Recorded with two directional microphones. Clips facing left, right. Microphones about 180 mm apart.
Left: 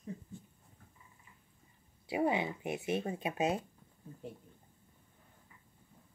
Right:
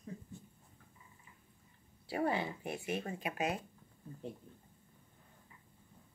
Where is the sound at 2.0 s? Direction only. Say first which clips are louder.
Left 3 dB; 15° left (ahead or behind).